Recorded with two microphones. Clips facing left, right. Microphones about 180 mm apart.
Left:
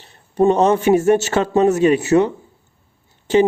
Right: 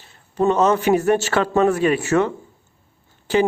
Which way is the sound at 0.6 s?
20° left (ahead or behind).